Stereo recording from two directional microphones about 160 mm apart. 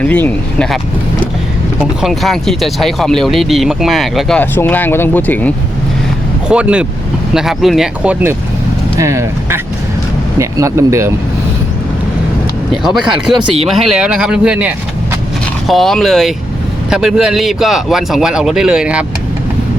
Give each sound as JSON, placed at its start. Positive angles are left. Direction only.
{"t": 0.0, "sound": "speech", "side_deg": 10}
{"t": 2.0, "sound": "speech", "side_deg": 0}
{"t": 4.4, "sound": "speech", "side_deg": 10}
{"t": 6.5, "sound": "speech", "side_deg": -5}
{"t": 9.0, "sound": "speech", "side_deg": -20}
{"t": 12.7, "sound": "speech", "side_deg": 0}